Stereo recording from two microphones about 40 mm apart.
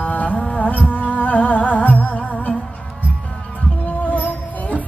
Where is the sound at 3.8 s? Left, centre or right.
Left.